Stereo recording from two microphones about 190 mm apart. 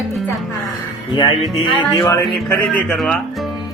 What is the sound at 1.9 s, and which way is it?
Speech, 15° left (ahead or behind).